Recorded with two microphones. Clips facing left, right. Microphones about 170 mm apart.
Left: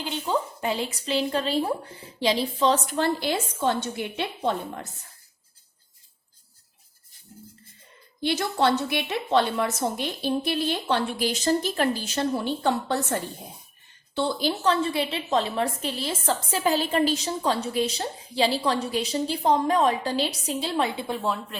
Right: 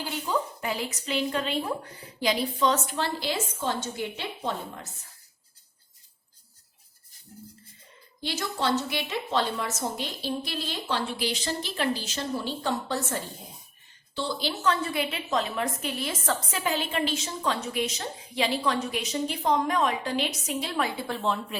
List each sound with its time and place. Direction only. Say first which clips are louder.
0.0 s speech: left 2 dB; 25° left (ahead or behind)
3.0 s a woman's voice: left 5 dB; 55° left (ahead or behind)
8.2 s a woman's voice: left 6 dB; 60° left (ahead or behind)
11.3 s a woman's voice: left 7 dB; 45° left (ahead or behind)
14.2 s a woman's voice: left 5 dB; 50° left (ahead or behind)
14.6 s a woman's voice: left 2 dB; 30° left (ahead or behind); by 21.6 s 5° left (ahead or behind)